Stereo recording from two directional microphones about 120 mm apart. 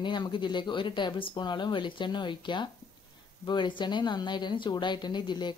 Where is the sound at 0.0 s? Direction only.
40° left (ahead or behind).